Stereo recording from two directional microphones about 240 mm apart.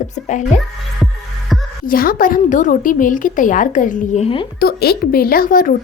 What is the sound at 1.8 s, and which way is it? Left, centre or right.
A woman's voice, left.